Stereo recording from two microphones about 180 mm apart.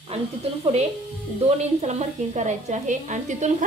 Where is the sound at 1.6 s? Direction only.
40° right (ahead or behind).